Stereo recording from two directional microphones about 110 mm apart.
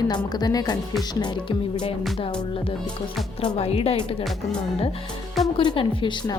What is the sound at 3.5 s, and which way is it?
Speech, 65° left (ahead or behind).